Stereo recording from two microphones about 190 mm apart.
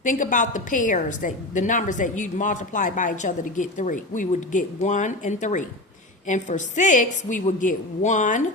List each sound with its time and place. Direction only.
0.0 s a woman's voice: 45° left (ahead or behind)